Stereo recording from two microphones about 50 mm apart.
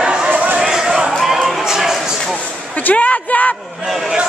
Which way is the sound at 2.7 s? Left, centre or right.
Left.